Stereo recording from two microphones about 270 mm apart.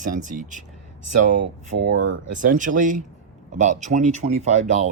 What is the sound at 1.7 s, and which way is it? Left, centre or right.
Speech, right.